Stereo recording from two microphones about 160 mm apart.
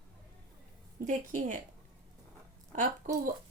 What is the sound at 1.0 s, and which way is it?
Speech, 50° right (ahead or behind).